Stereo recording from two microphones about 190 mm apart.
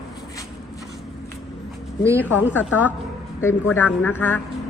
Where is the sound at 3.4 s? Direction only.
10° left (ahead or behind).